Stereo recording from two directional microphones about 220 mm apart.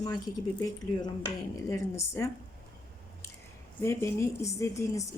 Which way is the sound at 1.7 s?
15° left (ahead or behind).